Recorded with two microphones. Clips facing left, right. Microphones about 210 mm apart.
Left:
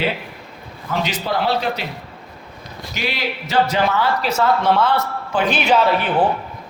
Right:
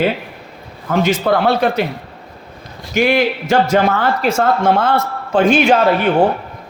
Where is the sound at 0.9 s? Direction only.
50° right (ahead or behind).